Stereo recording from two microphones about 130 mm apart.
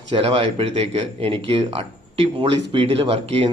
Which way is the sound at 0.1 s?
45° right (ahead or behind).